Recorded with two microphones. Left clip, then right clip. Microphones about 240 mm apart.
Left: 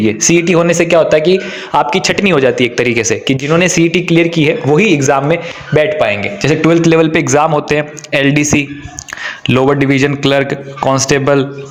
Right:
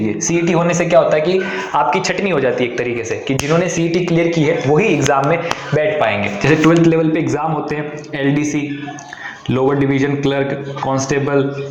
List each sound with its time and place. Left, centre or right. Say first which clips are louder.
0.2 s a man's voice: left 5 dB; left
3.5 s speech: left 6 dB; left
9.5 s speech: left 5 dB; left